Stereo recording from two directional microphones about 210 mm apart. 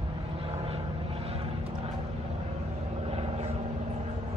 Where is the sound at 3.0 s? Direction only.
30° right (ahead or behind).